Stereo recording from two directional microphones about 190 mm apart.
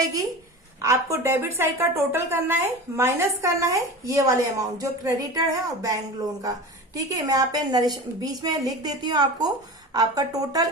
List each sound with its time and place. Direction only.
0.8 s a woman's voice: 15° right (ahead or behind)